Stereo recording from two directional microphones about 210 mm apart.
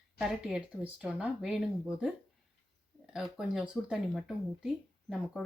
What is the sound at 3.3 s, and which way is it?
Speech, 5° right (ahead or behind).